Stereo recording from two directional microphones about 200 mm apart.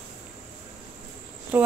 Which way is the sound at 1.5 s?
10° right (ahead or behind).